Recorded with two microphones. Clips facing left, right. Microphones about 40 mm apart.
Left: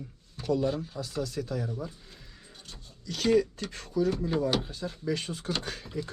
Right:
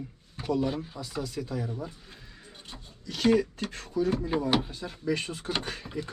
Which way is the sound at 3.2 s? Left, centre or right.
Right.